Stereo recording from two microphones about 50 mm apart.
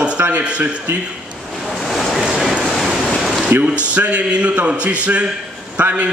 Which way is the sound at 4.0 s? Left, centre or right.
Right.